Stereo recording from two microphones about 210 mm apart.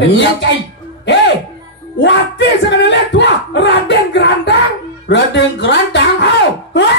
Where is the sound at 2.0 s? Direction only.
55° left (ahead or behind).